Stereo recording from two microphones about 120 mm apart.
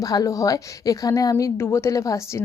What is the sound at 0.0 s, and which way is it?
A woman's voice, 30° left (ahead or behind).